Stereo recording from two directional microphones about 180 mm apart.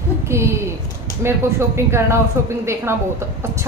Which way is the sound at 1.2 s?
15° right (ahead or behind).